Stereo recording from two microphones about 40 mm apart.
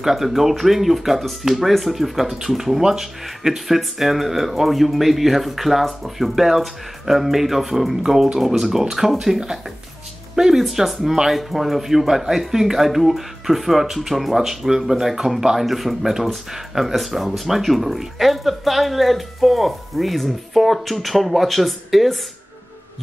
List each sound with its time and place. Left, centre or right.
0.0 s speech: centre